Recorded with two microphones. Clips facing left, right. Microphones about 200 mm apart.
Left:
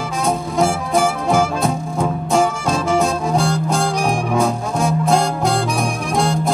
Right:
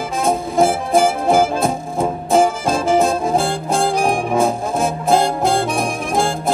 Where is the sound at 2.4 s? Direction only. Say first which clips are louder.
Right 2 dB; 30° right (ahead or behind).